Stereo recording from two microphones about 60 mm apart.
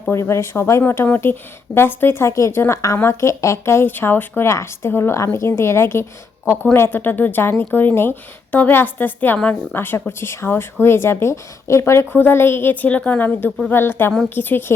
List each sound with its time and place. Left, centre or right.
0.1 s a woman's voice: left
3.8 s speech: left
4.4 s a woman's voice: left
12.1 s speech: left
13.7 s speech: left